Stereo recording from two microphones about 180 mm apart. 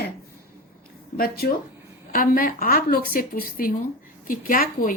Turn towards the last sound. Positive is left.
turn(degrees=50)  # may be behind; listen again after turning